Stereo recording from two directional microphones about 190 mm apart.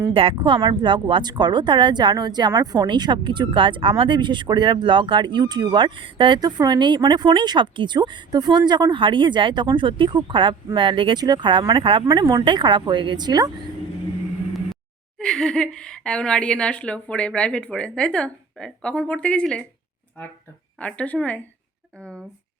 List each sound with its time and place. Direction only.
0.1 s speech: 30° right (ahead or behind)
15.2 s a woman's voice: 5° left (ahead or behind)
20.7 s speech: 5° left (ahead or behind)